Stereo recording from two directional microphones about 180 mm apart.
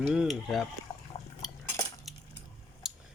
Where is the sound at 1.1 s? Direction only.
30° left (ahead or behind).